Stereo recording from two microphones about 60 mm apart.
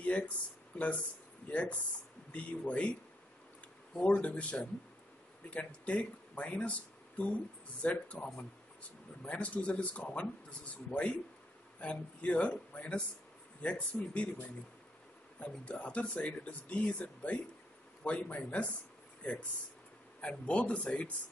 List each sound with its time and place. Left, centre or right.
0.0 s a sound: left
0.7 s speech: left
4.2 s speech: left